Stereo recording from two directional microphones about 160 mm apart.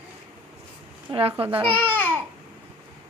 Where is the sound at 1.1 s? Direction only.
35° right (ahead or behind).